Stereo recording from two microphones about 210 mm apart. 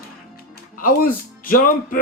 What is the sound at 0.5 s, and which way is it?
Music, 40° left (ahead or behind).